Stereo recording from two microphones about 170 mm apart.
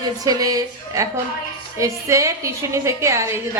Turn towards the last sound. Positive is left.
turn(degrees=-15)  # may be behind; listen again after turning